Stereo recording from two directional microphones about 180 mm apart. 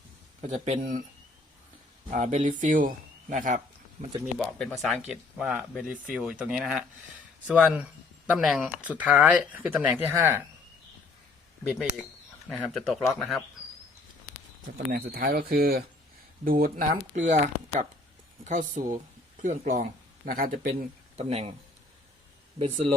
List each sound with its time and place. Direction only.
0.4 s speech: 40° right (ahead or behind)
2.0 s speech: 45° right (ahead or behind)
4.4 s speech: centre (ahead or behind)
12.5 s speech: centre (ahead or behind)
14.9 s speech: 55° right (ahead or behind)
21.2 s speech: 35° right (ahead or behind)